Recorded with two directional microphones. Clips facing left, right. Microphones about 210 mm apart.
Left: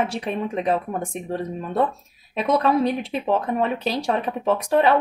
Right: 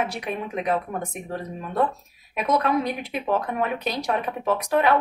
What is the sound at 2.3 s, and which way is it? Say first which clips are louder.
Speech: left 3 dB; 30° left (ahead or behind).